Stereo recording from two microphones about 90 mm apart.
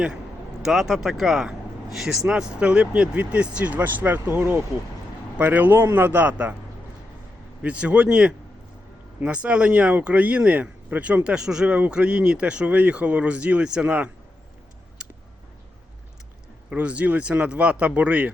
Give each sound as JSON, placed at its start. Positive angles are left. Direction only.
{"t": 0.6, "sound": "speech", "side_deg": -5}
{"t": 7.6, "sound": "speech", "side_deg": -15}
{"t": 16.6, "sound": "speech", "side_deg": -15}